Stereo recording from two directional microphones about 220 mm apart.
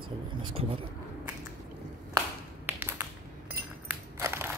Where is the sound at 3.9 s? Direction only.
10° right (ahead or behind).